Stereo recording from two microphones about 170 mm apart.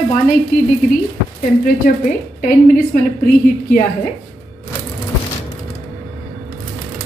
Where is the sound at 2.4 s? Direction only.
55° left (ahead or behind).